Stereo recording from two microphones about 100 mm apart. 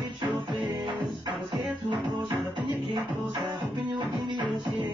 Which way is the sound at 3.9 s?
50° right (ahead or behind).